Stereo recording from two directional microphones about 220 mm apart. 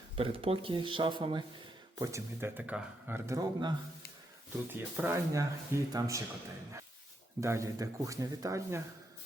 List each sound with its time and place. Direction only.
0.2 s speech: 25° right (ahead or behind)
7.4 s speech: 15° right (ahead or behind)